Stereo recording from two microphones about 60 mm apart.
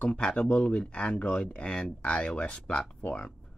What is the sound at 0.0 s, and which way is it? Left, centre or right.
Speech, centre.